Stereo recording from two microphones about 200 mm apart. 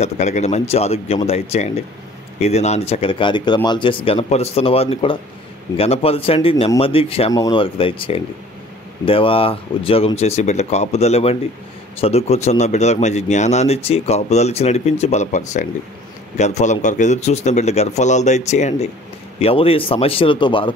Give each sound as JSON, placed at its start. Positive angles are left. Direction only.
{"t": 0.0, "sound": "speech", "side_deg": 35}